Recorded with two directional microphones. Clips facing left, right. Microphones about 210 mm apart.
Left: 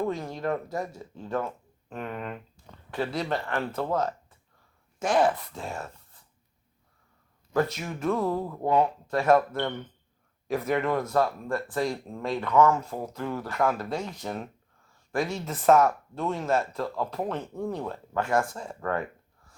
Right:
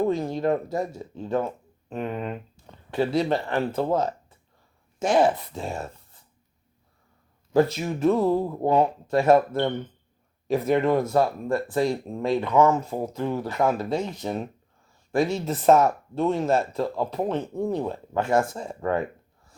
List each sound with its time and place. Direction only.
0.0 s speech: 25° right (ahead or behind)
7.5 s speech: 25° right (ahead or behind)